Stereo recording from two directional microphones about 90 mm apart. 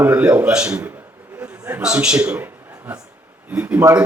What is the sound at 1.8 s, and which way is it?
A man's voice, 10° right (ahead or behind).